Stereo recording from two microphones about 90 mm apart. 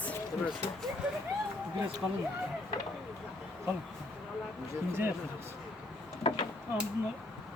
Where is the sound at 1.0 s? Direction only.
10° right (ahead or behind).